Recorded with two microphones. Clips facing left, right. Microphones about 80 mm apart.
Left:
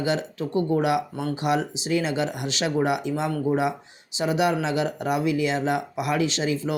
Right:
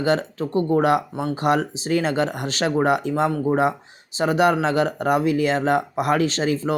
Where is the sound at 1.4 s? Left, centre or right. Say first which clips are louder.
Right 4 dB; right.